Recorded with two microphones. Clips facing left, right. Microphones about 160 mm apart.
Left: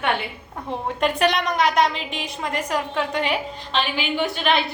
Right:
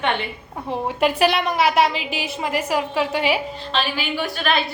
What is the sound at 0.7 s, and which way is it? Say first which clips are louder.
A woman's voice: right 3 dB; 5° right (ahead or behind).